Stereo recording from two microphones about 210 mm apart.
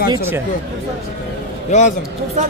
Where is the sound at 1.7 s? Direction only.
35° left (ahead or behind).